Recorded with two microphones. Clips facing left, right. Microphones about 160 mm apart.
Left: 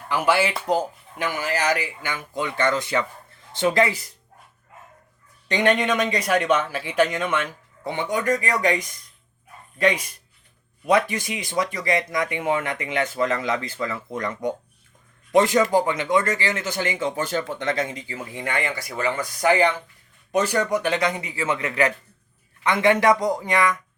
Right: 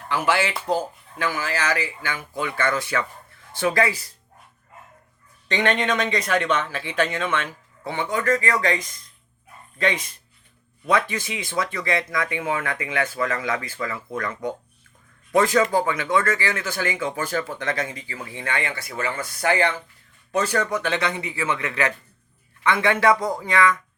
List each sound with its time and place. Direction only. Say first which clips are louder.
0.1 s speech: left 2 dB; 15° left (ahead or behind)
5.5 s speech: left 2 dB; 10° left (ahead or behind)
15.3 s a man's voice: left 1 dB; 20° left (ahead or behind)
22.6 s speech: left 1 dB; 15° left (ahead or behind)